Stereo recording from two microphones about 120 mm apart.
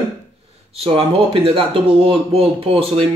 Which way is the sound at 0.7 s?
50° right (ahead or behind).